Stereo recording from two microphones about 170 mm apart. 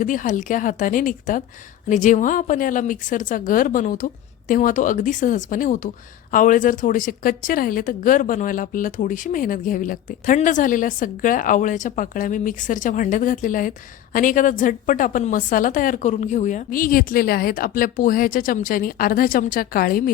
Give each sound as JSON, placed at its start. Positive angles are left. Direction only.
{"t": 0.0, "sound": "a woman's voice", "side_deg": 50}